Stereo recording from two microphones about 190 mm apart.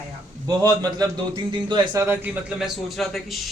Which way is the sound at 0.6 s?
20° right (ahead or behind).